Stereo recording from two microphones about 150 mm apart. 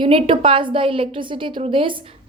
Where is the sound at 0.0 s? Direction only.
35° right (ahead or behind).